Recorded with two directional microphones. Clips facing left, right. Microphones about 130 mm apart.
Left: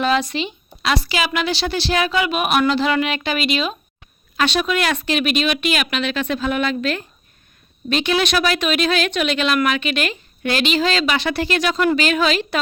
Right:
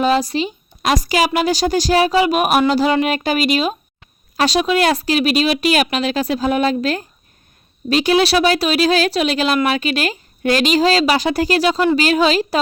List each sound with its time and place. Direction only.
0.0 s a woman's voice: 35° right (ahead or behind)